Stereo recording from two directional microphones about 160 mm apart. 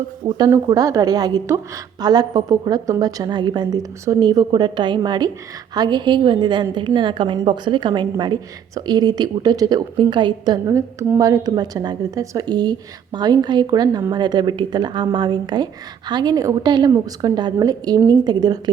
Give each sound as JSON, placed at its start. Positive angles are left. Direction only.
{"t": 0.3, "sound": "a woman's voice", "side_deg": -25}